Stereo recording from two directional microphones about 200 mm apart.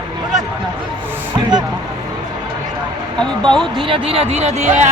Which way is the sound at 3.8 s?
25° right (ahead or behind).